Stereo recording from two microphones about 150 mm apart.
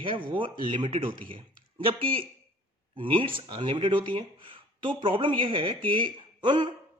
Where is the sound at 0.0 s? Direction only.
35° right (ahead or behind).